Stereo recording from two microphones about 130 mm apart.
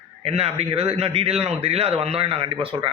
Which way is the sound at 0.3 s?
50° right (ahead or behind).